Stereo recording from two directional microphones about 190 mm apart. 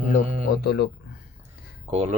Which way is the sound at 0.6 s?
55° left (ahead or behind).